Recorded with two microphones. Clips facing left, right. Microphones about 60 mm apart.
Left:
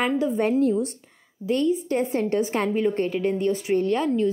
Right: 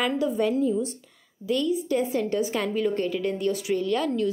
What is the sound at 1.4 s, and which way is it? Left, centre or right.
A woman's voice, left.